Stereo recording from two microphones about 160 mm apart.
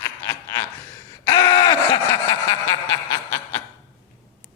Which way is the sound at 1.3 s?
25° left (ahead or behind).